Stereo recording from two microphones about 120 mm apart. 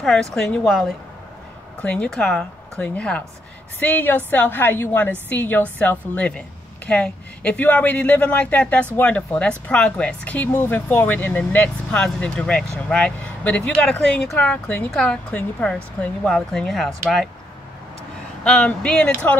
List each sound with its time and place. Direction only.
0.0 s a woman's voice: 5° left (ahead or behind)
1.8 s speech: 10° left (ahead or behind)
18.4 s speech: 10° left (ahead or behind)